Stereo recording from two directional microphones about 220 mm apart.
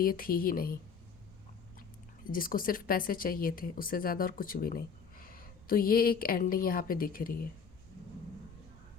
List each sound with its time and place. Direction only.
0.0 s speech: 40° left (ahead or behind)
2.2 s speech: 40° left (ahead or behind)